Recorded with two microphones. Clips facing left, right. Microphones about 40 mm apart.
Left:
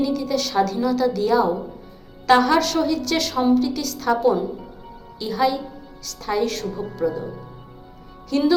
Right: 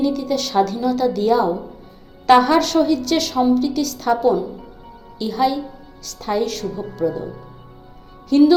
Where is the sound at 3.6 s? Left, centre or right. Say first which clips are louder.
Right 3 dB; centre.